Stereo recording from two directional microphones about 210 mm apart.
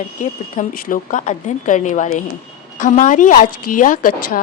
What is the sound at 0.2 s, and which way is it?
Speech, 40° left (ahead or behind).